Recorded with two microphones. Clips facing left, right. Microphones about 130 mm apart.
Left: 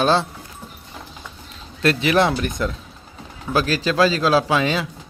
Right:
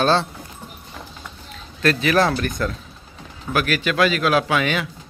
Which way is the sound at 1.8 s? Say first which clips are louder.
Left 1 dB; 25° left (ahead or behind).